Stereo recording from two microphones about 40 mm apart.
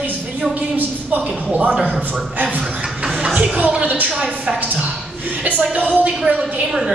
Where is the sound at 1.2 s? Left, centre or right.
Right.